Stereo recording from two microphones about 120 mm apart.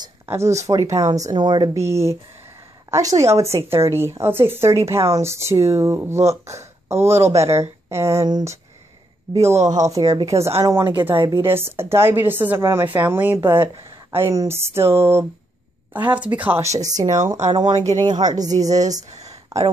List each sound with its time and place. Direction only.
0.3 s a woman's voice: 25° right (ahead or behind)
1.8 s a woman's voice: 25° right (ahead or behind)
16.6 s a woman's voice: 30° right (ahead or behind)
19.1 s a sound: 65° right (ahead or behind)